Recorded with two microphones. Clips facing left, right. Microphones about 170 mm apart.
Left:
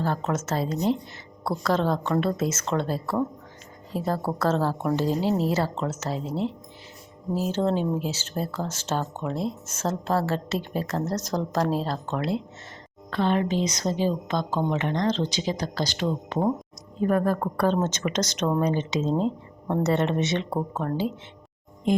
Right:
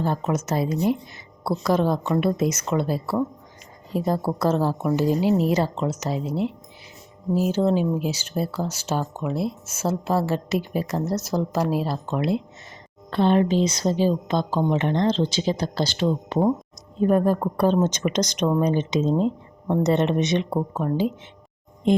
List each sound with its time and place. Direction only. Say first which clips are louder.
0.0 s speech: right 2 dB; 15° right (ahead or behind)
13.1 s speech: right 5 dB; 30° right (ahead or behind)
13.6 s speech: right 5 dB; 15° left (ahead or behind)
14.3 s speech: right 3 dB; 20° right (ahead or behind)
15.4 s speech: right 4 dB; 15° left (ahead or behind)
17.1 s speech: right 3 dB; 20° right (ahead or behind)